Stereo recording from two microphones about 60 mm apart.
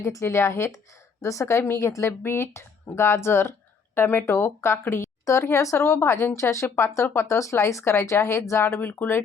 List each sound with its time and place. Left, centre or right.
0.0 s speech: left
1.2 s speech: left
8.8 s speech: left